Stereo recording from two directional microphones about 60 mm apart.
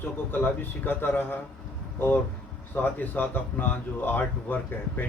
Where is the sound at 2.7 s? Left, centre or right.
Left.